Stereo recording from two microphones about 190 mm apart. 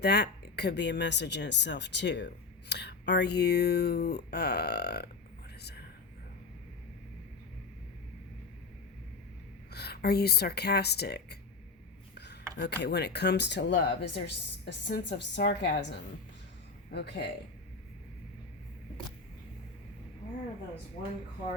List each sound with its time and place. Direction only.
0.0 s speech: 60° left (ahead or behind)
9.7 s speech: 55° left (ahead or behind)
12.1 s filing: 60° left (ahead or behind)
12.5 s speech: 65° left (ahead or behind)